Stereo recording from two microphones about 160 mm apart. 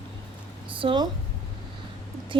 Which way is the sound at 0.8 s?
35° right (ahead or behind).